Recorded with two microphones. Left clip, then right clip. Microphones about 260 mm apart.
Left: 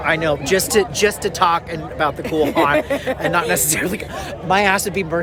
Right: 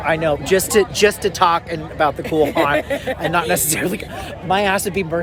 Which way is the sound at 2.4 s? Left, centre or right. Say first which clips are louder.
Left 1 dB; centre.